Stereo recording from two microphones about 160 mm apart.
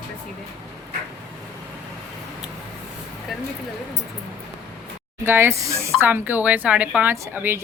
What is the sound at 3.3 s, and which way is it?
Speech, centre (ahead or behind).